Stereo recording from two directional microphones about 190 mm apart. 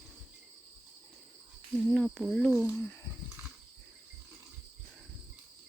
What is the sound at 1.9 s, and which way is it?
Speech, 5° left (ahead or behind).